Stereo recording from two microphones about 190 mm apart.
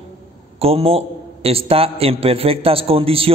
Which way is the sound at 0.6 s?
30° right (ahead or behind).